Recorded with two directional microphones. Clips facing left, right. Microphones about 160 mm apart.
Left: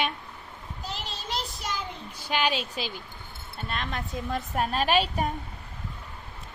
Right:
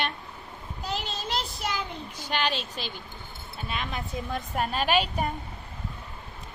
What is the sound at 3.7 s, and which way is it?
Speech, 5° right (ahead or behind).